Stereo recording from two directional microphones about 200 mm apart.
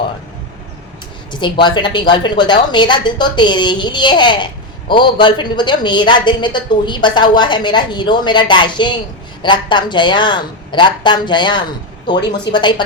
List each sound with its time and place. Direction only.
1.3 s a woman's voice: 25° left (ahead or behind)